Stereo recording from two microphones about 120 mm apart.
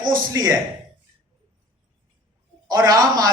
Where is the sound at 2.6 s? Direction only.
30° right (ahead or behind).